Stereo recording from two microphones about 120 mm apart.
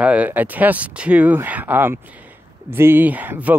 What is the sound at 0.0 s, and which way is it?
Speech, 10° right (ahead or behind).